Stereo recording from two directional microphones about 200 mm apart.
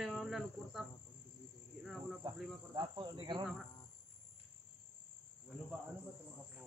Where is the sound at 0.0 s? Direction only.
Centre (ahead or behind).